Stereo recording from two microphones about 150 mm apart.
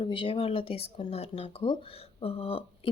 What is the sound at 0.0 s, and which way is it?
Speech, 35° left (ahead or behind).